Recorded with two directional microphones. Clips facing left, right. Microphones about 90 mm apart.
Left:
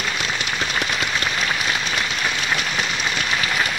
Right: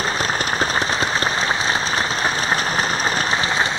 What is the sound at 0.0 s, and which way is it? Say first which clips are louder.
Applause: right 4 dB; 40° right (ahead or behind).